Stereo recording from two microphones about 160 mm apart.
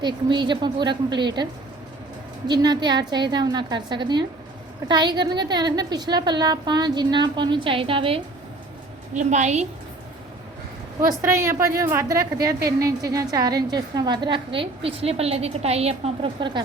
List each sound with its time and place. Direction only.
0.0 s a woman's voice: 30° right (ahead or behind)
2.5 s a woman's voice: 25° right (ahead or behind)
9.1 s a woman's voice: 45° right (ahead or behind)
11.2 s a woman's voice: 15° right (ahead or behind); by 16.6 s 30° right (ahead or behind)